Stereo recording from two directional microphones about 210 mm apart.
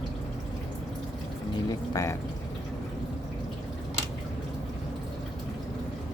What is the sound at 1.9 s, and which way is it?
Speech, 15° left (ahead or behind).